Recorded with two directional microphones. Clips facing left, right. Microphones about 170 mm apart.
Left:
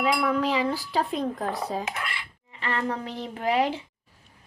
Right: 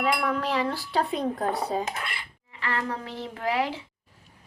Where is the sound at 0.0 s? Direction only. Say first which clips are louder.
Left 2 dB; 5° left (ahead or behind).